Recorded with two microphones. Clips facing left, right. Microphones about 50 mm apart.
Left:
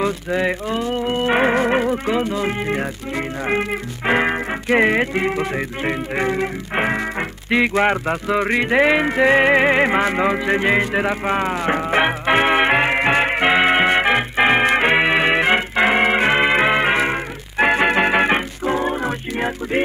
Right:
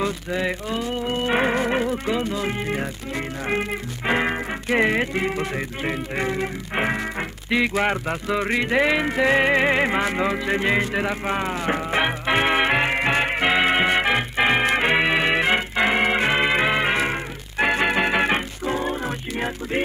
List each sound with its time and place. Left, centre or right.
0.0 s music: centre